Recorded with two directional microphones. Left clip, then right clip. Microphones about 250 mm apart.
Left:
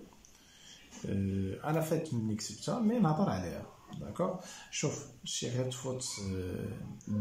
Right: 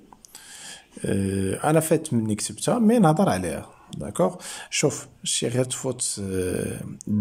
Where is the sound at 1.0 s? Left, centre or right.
Right.